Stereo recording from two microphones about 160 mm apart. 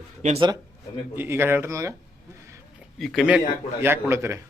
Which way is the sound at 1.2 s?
15° right (ahead or behind).